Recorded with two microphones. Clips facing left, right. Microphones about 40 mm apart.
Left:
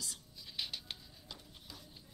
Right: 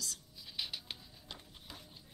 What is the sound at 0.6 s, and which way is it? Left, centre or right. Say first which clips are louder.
Patter: even; centre.